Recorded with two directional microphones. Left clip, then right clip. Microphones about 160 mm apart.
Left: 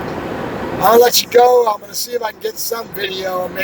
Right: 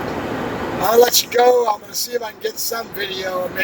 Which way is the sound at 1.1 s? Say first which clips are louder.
Left 4 dB; 25° left (ahead or behind).